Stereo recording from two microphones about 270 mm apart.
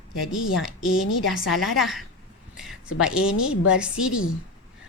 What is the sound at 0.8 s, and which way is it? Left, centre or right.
Speech, left.